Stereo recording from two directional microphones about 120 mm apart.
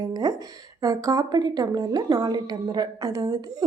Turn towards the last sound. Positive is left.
turn(degrees=-30)  # may be behind; listen again after turning